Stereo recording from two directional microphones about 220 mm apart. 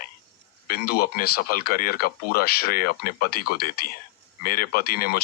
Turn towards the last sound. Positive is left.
turn(degrees=40)  # may be behind; listen again after turning